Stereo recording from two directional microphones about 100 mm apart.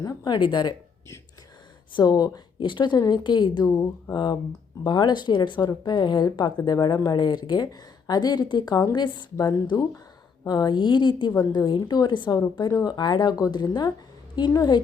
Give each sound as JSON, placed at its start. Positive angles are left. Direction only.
{"t": 0.0, "sound": "speech", "side_deg": 40}
{"t": 1.9, "sound": "speech", "side_deg": 45}